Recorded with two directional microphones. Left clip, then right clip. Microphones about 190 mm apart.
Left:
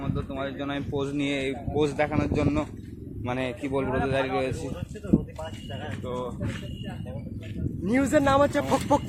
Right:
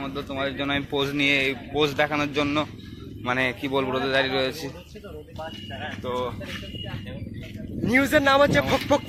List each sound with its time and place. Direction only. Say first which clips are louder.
0.0 s speech: right 4 dB; 25° right (ahead or behind)
0.9 s speech: right 7 dB; centre (ahead or behind)
2.0 s speech: right 3 dB; centre (ahead or behind)
6.1 s speech: right 5 dB; 20° right (ahead or behind)
7.9 s speech: right 3 dB; 5° left (ahead or behind)